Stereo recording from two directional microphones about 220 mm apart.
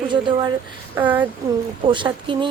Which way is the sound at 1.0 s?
10° right (ahead or behind).